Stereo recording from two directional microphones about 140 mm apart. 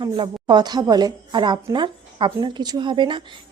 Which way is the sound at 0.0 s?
30° right (ahead or behind).